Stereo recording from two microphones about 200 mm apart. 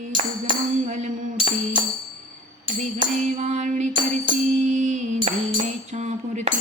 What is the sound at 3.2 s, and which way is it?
Music, 35° right (ahead or behind).